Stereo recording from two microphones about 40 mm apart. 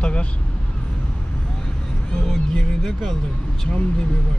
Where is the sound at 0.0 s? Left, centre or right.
Left.